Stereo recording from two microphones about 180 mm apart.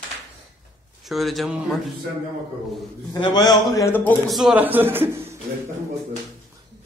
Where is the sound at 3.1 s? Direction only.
20° left (ahead or behind); by 5.3 s 10° right (ahead or behind).